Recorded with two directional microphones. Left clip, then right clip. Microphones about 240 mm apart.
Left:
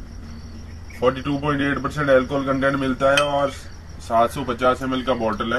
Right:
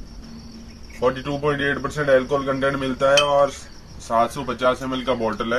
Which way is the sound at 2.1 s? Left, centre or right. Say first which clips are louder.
Even; centre.